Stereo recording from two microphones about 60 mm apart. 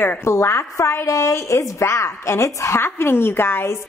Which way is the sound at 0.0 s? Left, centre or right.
Left.